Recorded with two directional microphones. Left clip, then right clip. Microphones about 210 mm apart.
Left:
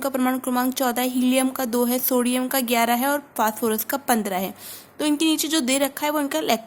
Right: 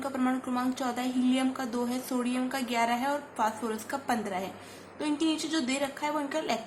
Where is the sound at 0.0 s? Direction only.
50° left (ahead or behind).